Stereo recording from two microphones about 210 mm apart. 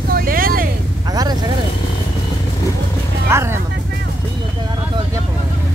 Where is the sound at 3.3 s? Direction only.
15° right (ahead or behind).